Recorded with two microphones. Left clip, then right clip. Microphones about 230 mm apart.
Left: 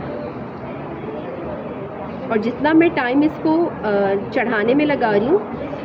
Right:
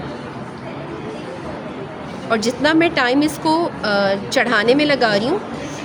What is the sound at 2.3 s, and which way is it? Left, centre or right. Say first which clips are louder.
A woman's voice: even; right.